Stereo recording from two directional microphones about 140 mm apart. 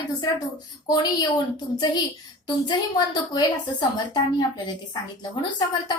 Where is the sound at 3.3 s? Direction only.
30° left (ahead or behind).